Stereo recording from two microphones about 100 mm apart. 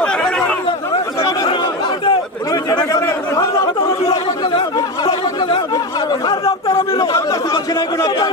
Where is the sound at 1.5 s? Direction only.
55° left (ahead or behind).